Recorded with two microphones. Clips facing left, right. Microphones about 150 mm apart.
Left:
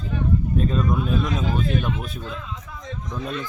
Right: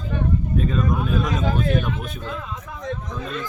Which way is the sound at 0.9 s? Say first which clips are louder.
Even; 55° right (ahead or behind).